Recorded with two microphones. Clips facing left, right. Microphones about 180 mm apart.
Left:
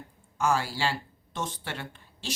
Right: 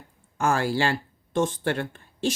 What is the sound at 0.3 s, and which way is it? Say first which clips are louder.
Speech: right 4 dB; 50° right (ahead or behind).